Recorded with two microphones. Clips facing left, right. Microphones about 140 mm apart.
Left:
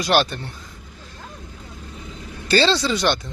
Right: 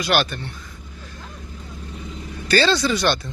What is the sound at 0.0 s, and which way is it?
Speech, 35° left (ahead or behind).